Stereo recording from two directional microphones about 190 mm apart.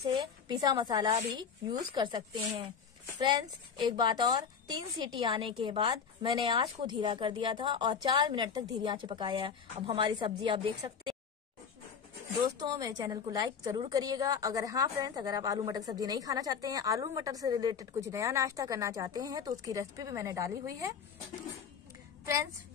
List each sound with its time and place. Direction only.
0.5 s a woman's voice: 20° right (ahead or behind)
12.6 s a woman's voice: 20° right (ahead or behind)